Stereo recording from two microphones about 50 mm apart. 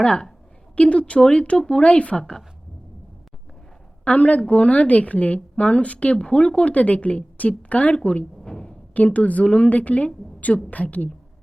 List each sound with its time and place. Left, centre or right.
0.0 s a woman's voice: centre
2.1 s a woman's voice: centre
4.0 s a woman's voice: left
8.4 s a sound: centre
8.9 s a woman's voice: left